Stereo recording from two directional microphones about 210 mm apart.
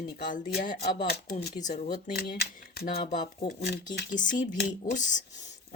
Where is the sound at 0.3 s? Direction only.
40° left (ahead or behind).